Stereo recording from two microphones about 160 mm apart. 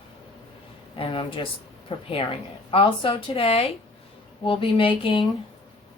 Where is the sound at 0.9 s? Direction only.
35° left (ahead or behind).